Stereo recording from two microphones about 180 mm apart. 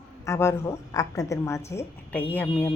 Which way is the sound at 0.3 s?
15° left (ahead or behind).